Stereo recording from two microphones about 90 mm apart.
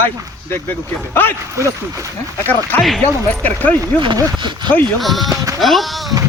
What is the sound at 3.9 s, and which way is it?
Speech, 60° right (ahead or behind).